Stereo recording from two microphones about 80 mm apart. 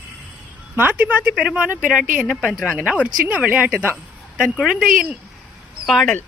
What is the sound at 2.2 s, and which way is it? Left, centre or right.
Speech, centre.